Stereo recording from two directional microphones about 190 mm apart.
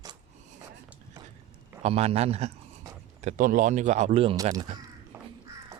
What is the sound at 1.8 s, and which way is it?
Speech, 30° right (ahead or behind).